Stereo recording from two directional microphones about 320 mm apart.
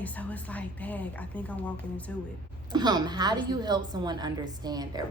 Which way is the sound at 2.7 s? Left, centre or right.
Centre.